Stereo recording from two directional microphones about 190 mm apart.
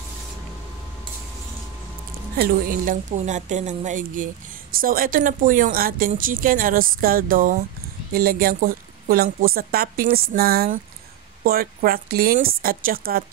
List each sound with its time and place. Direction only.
2.3 s a woman's voice: 50° right (ahead or behind)